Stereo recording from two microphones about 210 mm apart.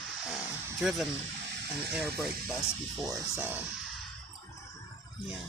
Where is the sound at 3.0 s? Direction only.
10° right (ahead or behind).